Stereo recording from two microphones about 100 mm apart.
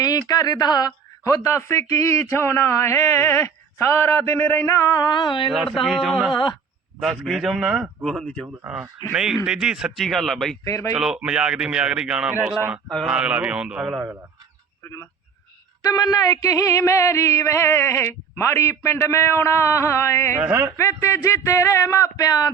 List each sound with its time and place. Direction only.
0.0 s speech: 40° left (ahead or behind)
4.9 s music: 45° left (ahead or behind)
5.5 s speech: centre (ahead or behind)
6.3 s music: 50° left (ahead or behind)
7.0 s speech: centre (ahead or behind)
10.6 s speech: 30° left (ahead or behind)
10.9 s a man's voice: 5° right (ahead or behind)
15.8 s speech: 40° left (ahead or behind)
20.4 s speech: 20° right (ahead or behind)
20.7 s speech: 30° left (ahead or behind)